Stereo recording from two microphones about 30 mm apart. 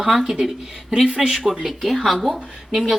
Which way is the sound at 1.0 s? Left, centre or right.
Right.